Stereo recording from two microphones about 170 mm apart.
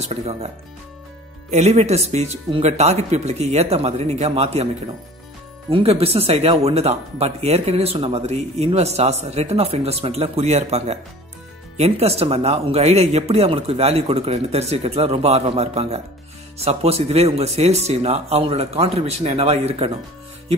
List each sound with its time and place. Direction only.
0.0 s speech: 40° right (ahead or behind)
1.5 s speech: 40° right (ahead or behind)
5.7 s speech: 35° right (ahead or behind)